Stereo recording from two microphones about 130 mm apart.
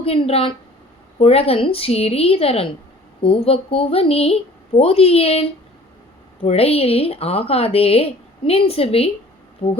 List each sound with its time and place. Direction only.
0.0 s a woman's voice: 50° left (ahead or behind)